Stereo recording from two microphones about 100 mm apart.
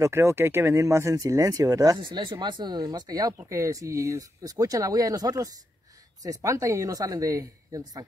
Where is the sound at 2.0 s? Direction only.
55° right (ahead or behind).